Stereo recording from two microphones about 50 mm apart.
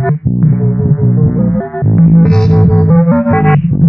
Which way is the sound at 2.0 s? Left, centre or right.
Centre.